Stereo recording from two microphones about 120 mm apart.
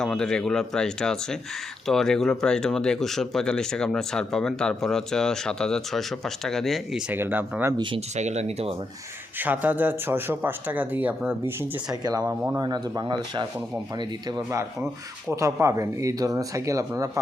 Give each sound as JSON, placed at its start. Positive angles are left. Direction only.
{"t": 0.0, "sound": "speech", "side_deg": 5}
{"t": 7.1, "sound": "speech", "side_deg": -15}
{"t": 7.8, "sound": "speech", "side_deg": -45}
{"t": 8.1, "sound": "speech", "side_deg": -70}
{"t": 9.4, "sound": "speech", "side_deg": -15}
{"t": 12.0, "sound": "speech", "side_deg": -35}